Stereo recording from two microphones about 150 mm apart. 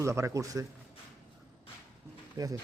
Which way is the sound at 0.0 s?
20° right (ahead or behind).